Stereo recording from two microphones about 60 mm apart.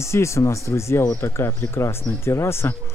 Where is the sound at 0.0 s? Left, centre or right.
Left.